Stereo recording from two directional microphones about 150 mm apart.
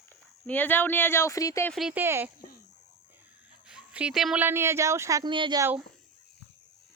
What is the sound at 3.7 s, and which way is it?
Speech, 5° right (ahead or behind).